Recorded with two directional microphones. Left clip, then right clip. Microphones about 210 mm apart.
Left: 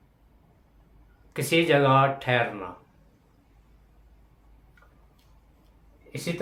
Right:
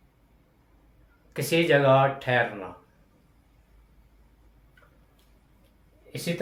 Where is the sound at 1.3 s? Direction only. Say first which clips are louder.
Even; 20° left (ahead or behind).